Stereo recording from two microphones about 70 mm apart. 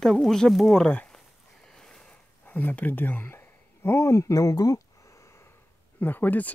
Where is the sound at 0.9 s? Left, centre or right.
Centre.